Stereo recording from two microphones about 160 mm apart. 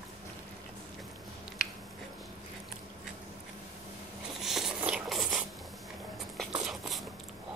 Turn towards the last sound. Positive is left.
turn(degrees=0)  # may be behind; listen again after turning